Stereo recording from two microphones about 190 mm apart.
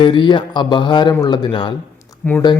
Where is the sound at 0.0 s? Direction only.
25° left (ahead or behind).